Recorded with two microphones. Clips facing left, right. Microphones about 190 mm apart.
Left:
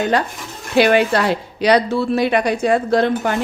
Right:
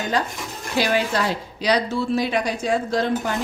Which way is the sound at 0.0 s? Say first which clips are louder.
Left 5 dB; 65° left (ahead or behind).